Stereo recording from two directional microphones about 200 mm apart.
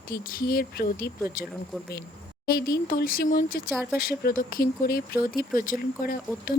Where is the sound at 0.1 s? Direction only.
45° left (ahead or behind).